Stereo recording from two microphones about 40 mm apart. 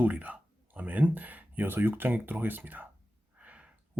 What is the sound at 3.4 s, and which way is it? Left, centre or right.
Gasp, right.